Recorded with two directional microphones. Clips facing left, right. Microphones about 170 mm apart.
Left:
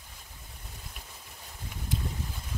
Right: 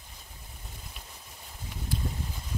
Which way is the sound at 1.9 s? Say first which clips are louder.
Even; 20° left (ahead or behind).